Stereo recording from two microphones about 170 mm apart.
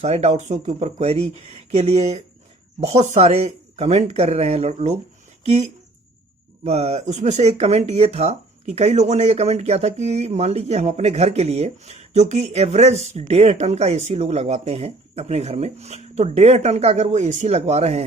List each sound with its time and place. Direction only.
0.0 s speech: 40° right (ahead or behind)
6.7 s speech: 40° right (ahead or behind)